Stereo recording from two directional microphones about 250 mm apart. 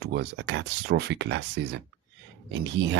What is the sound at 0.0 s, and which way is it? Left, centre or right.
Speech, right.